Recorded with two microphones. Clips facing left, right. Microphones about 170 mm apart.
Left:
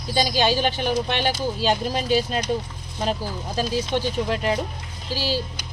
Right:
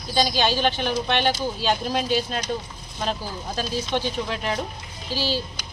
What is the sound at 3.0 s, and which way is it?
Speech, 10° left (ahead or behind).